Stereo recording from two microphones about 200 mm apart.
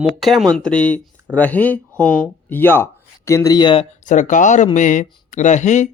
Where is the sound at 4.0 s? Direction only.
40° left (ahead or behind).